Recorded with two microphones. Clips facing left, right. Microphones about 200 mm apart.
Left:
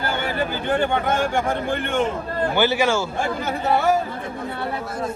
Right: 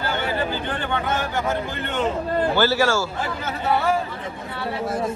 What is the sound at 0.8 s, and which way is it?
Speech, 50° left (ahead or behind).